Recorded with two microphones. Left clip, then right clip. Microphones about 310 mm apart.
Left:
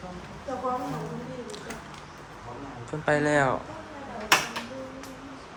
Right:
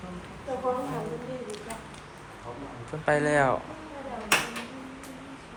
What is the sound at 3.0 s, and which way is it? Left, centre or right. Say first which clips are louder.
Speech: even; centre.